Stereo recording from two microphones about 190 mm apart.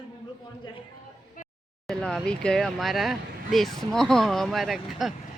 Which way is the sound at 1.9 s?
Centre (ahead or behind).